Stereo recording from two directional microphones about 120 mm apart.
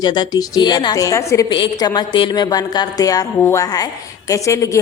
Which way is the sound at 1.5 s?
40° left (ahead or behind).